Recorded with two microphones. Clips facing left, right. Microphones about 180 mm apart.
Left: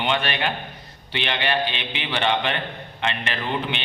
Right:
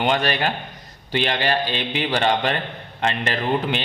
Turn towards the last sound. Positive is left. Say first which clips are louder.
# right 5 dB
turn(degrees=-40)  # may be behind; listen again after turning